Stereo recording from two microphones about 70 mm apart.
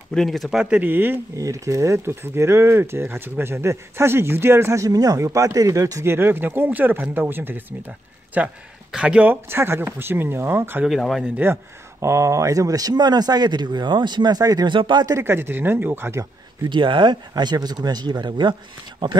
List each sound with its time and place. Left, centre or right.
0.1 s speech: centre
0.5 s speech: centre
0.8 s speech: right
1.3 s speech: right
6.0 s speech: right
9.6 s speech: right
11.0 s speech: centre
12.0 s speech: right
15.0 s speech: right
17.0 s speech: right